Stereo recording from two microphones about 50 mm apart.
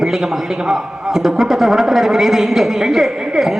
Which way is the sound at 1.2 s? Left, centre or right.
Centre.